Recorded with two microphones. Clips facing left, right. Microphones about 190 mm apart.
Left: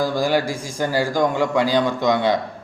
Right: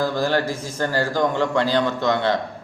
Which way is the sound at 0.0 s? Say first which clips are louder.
Left 1 dB; 10° left (ahead or behind).